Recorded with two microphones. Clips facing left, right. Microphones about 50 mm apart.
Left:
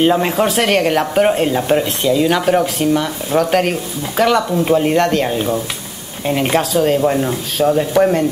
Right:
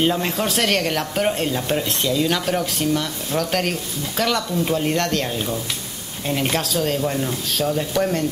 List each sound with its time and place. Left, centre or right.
0.0 s speech: centre